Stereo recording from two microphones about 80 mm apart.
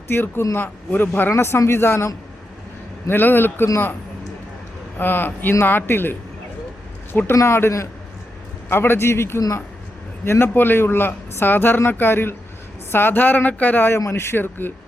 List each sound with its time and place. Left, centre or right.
0.1 s speech: left
3.1 s speech: left
4.9 s a man's voice: left